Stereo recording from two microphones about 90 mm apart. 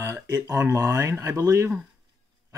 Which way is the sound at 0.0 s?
30° right (ahead or behind).